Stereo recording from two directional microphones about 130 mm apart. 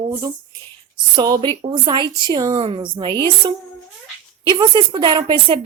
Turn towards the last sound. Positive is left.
turn(degrees=-40)  # may be behind; listen again after turning